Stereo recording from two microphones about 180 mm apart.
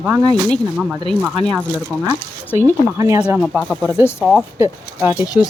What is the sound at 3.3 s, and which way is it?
Speech, 5° right (ahead or behind).